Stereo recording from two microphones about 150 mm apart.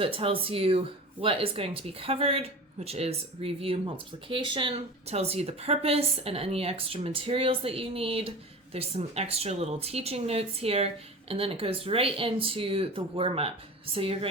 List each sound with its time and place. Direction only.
0.0 s speech: 40° right (ahead or behind)